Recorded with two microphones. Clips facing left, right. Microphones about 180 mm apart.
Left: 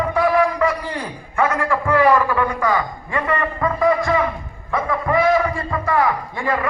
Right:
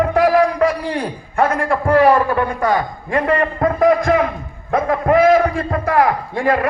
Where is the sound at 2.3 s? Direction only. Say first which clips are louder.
Right 2 dB; 50° right (ahead or behind).